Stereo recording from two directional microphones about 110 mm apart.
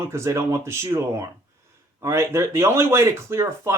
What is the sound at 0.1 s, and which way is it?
Speech, 25° right (ahead or behind).